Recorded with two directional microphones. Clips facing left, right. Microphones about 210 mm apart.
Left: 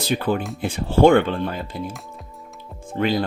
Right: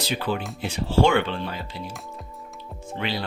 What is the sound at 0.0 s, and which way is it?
Speech, 50° left (ahead or behind).